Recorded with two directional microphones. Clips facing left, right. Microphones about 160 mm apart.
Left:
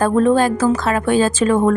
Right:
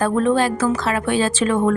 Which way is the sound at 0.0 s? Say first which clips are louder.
Left 3 dB; 40° left (ahead or behind).